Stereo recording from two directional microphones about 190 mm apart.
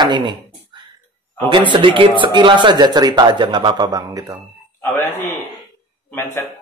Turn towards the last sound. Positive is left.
turn(degrees=15)  # may be behind; listen again after turning